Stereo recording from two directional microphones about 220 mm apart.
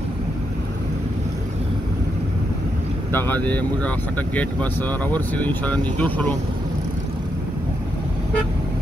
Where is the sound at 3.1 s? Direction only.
10° left (ahead or behind).